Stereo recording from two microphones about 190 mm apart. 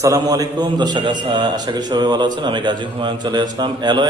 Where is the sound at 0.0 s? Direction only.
20° right (ahead or behind).